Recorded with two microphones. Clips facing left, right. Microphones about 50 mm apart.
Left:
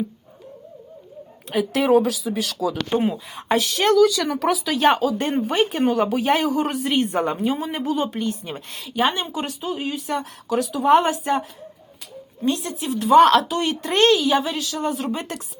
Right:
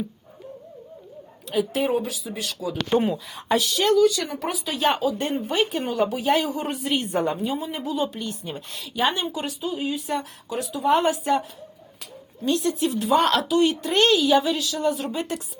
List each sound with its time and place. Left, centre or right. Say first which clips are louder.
1.7 s speech: left 11 dB; left
2.9 s speech: right 2 dB; centre
3.2 s speech: left 2 dB; left
3.9 s speech: left 3 dB; left
4.8 s speech: left 2 dB; left
6.5 s speech: left 4 dB; left
12.9 s a woman's voice: left 9 dB; left